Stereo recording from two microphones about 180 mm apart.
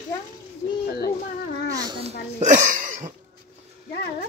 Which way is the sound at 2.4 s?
40° right (ahead or behind).